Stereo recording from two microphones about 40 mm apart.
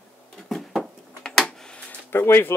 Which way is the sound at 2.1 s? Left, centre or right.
Left.